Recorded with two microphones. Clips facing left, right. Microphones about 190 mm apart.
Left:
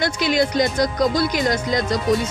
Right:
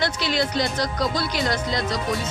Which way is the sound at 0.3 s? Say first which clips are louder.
Left 6 dB; 45° left (ahead or behind).